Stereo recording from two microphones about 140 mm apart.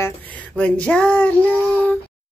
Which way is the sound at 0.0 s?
10° left (ahead or behind).